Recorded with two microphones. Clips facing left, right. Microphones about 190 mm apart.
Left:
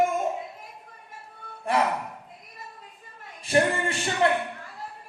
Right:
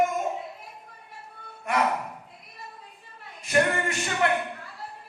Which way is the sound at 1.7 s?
30° left (ahead or behind).